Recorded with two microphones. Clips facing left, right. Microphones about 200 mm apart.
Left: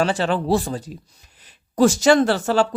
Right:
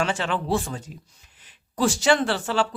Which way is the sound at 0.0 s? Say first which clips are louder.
Left 5 dB; 35° left (ahead or behind).